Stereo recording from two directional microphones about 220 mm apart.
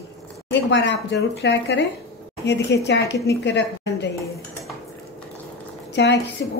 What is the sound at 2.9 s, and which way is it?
A woman's voice, 50° left (ahead or behind).